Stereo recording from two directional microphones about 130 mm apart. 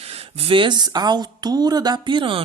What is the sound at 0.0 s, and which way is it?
Speech, 50° right (ahead or behind).